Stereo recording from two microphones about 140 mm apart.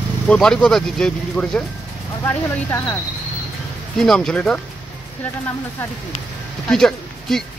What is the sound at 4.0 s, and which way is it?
Speech, 5° left (ahead or behind).